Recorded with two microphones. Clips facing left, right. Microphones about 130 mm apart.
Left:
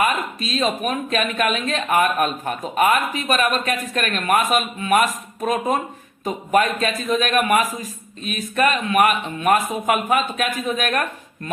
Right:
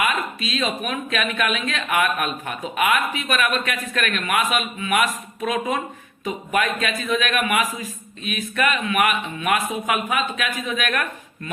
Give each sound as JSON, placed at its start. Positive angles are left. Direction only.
{"t": 0.0, "sound": "speech", "side_deg": 40}